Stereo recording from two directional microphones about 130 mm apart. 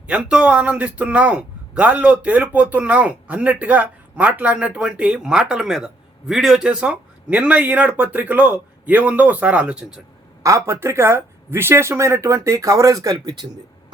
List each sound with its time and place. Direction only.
0.1 s a man's voice: 10° right (ahead or behind)
10.4 s speech: 25° right (ahead or behind)